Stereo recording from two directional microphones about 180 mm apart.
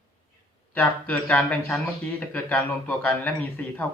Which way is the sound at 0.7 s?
10° left (ahead or behind).